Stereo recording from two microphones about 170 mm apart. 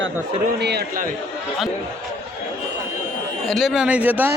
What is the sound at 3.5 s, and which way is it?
Speech, centre (ahead or behind).